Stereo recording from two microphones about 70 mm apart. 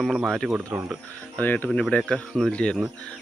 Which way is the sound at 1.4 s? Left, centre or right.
Left.